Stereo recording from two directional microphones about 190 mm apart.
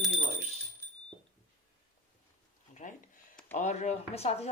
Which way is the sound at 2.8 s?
40° left (ahead or behind).